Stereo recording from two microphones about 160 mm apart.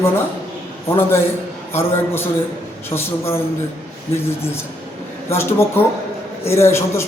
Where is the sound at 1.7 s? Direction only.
15° left (ahead or behind).